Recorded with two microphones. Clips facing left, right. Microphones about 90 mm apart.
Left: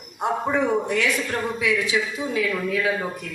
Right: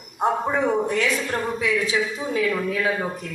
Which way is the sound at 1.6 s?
35° right (ahead or behind).